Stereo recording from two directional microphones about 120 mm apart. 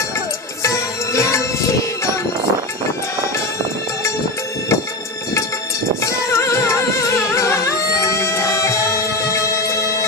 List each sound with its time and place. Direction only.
0.6 s music: 25° left (ahead or behind)
6.0 s music: 25° left (ahead or behind)